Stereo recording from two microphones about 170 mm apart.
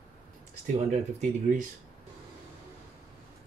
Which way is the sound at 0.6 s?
45° right (ahead or behind).